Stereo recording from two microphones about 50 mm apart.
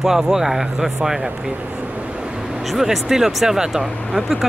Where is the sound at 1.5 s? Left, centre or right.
Right.